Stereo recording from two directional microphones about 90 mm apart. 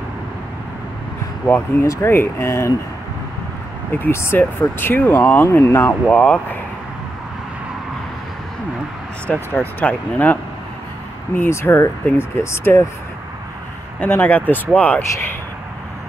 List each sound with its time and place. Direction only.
1.5 s speech: 25° left (ahead or behind)
4.0 s speech: 25° left (ahead or behind)
6.0 s speech: 10° left (ahead or behind)
9.3 s speech: 20° left (ahead or behind)
13.9 s speech: 20° left (ahead or behind)